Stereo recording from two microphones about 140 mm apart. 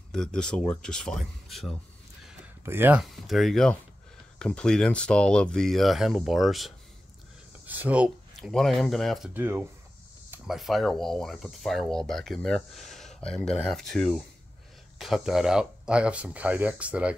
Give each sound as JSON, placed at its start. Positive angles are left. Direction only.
{"t": 0.1, "sound": "speech", "side_deg": 5}
{"t": 2.6, "sound": "speech", "side_deg": -15}
{"t": 3.0, "sound": "speech", "side_deg": 0}
{"t": 7.6, "sound": "a sound", "side_deg": -10}
{"t": 8.5, "sound": "speech", "side_deg": 0}
{"t": 9.3, "sound": "speech", "side_deg": -15}
{"t": 10.4, "sound": "speech", "side_deg": 0}
{"t": 12.9, "sound": "a sound", "side_deg": 0}
{"t": 13.5, "sound": "speech", "side_deg": 5}